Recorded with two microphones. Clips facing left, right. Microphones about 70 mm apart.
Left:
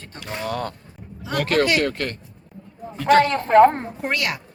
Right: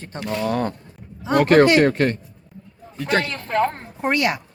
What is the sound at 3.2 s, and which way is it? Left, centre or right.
Speech, left.